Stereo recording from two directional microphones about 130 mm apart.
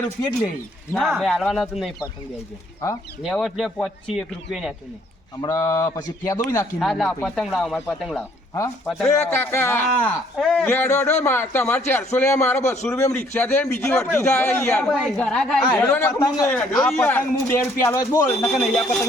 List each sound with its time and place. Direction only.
0.9 s speech: centre (ahead or behind)
3.2 s speech: centre (ahead or behind)
5.4 s speech: 30° left (ahead or behind)
6.7 s speech: centre (ahead or behind)
9.3 s a man's voice: 15° left (ahead or behind)
10.3 s speech: centre (ahead or behind)
10.7 s a man's voice: 15° left (ahead or behind)
14.9 s a man's voice: 5° left (ahead or behind)
16.1 s a man's voice: 30° left (ahead or behind)
16.5 s a man's voice: 5° left (ahead or behind); by 18.5 s 20° left (ahead or behind)
18.5 s speech: 5° left (ahead or behind)